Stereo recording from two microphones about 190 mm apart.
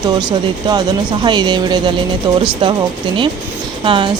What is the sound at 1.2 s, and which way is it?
Speech, 25° right (ahead or behind).